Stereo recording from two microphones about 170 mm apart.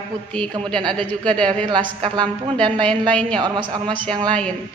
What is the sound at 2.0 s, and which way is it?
Speech, 25° right (ahead or behind).